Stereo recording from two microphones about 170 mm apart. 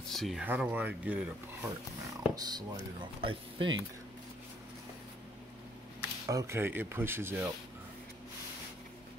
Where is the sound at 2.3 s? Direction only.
25° right (ahead or behind).